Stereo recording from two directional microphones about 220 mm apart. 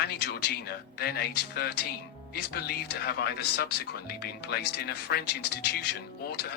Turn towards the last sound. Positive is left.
turn(degrees=45)  # may be behind; listen again after turning